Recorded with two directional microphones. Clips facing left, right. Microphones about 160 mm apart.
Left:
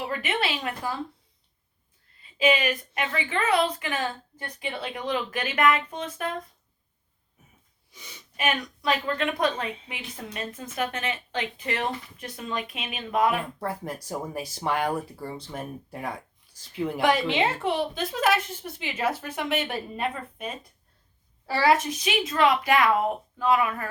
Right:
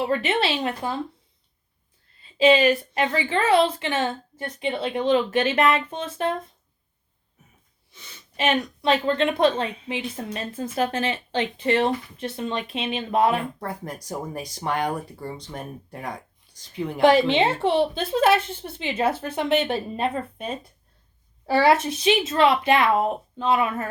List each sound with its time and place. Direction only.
0.0 s a woman's voice: 30° right (ahead or behind)
2.2 s a woman's voice: 30° right (ahead or behind)
7.9 s speech: 15° left (ahead or behind)
8.4 s a woman's voice: 25° right (ahead or behind)
13.6 s speech: 5° left (ahead or behind)
17.0 s a woman's voice: 30° right (ahead or behind)